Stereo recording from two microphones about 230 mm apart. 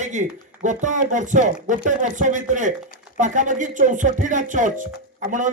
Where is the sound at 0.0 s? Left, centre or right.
Right.